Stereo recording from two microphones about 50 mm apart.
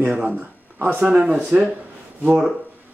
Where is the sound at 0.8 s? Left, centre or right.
Right.